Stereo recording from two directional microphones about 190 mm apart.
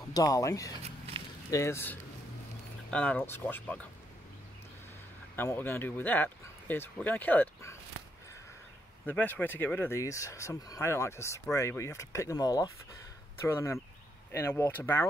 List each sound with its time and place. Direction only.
0.1 s speech: 20° left (ahead or behind)
0.8 s a sound: 35° right (ahead or behind)
1.5 s speech: 15° left (ahead or behind)
5.3 s speech: 10° left (ahead or behind)
9.0 s speech: 10° left (ahead or behind)